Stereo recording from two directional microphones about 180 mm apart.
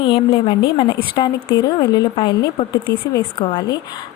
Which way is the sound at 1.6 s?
25° left (ahead or behind).